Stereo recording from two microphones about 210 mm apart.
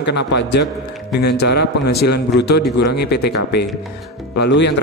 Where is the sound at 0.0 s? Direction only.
55° left (ahead or behind).